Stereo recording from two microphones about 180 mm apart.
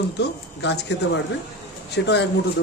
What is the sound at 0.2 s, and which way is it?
Speech, 70° left (ahead or behind).